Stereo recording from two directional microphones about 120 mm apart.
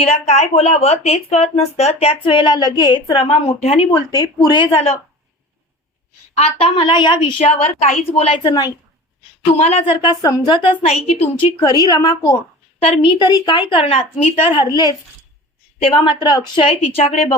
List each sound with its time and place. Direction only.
0.0 s a woman's voice: 65° left (ahead or behind)
2.2 s a woman's voice: 45° left (ahead or behind)
3.9 s speech: 30° left (ahead or behind)
6.3 s a woman's voice: 55° left (ahead or behind)
9.6 s a woman's voice: 55° left (ahead or behind)
11.6 s speech: 35° left (ahead or behind)
12.8 s a woman's voice: 45° left (ahead or behind)
15.8 s a woman's voice: 50° left (ahead or behind)
17.0 s a woman's voice: 70° left (ahead or behind)